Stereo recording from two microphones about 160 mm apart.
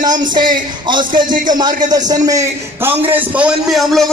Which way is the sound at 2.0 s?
25° right (ahead or behind).